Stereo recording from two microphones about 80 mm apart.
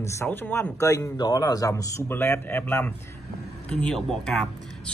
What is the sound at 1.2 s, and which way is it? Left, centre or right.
Speech, left.